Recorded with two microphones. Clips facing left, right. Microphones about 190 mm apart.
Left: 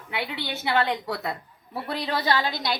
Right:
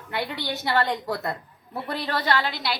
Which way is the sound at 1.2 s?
5° left (ahead or behind).